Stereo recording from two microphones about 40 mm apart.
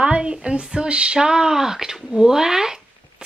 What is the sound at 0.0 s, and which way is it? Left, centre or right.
A woman's voice, right.